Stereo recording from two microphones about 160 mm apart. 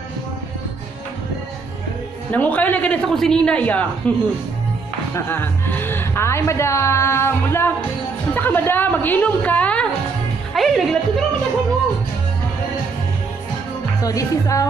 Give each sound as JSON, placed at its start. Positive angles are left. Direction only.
{"t": 2.3, "sound": "a woman's voice", "side_deg": 10}
{"t": 14.0, "sound": "a woman's voice", "side_deg": 20}